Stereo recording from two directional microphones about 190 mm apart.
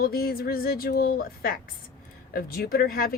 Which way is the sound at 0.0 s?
55° left (ahead or behind).